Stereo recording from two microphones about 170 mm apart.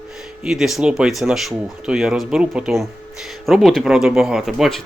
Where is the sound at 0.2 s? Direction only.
Centre (ahead or behind).